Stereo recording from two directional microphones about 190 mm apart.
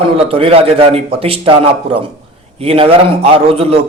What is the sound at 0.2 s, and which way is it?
A man's voice, 30° right (ahead or behind).